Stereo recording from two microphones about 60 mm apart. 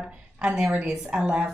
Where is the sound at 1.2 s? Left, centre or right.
Right.